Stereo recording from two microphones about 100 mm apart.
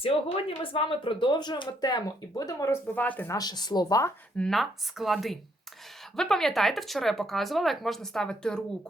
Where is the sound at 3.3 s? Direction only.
45° left (ahead or behind).